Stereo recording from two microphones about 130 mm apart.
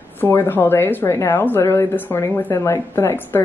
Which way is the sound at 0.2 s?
15° left (ahead or behind).